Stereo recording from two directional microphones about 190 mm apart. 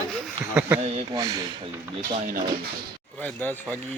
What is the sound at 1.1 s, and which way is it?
Speech, 20° right (ahead or behind).